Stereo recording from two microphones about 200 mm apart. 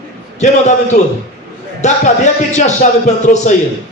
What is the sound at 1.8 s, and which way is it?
A man's voice, 35° left (ahead or behind).